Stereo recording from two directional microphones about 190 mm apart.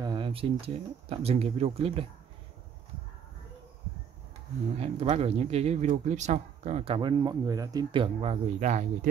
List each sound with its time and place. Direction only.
0.0 s speech: 25° right (ahead or behind)
4.7 s speech: 35° right (ahead or behind)